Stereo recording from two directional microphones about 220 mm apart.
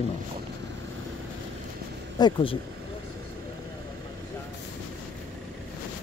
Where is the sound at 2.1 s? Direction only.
20° left (ahead or behind).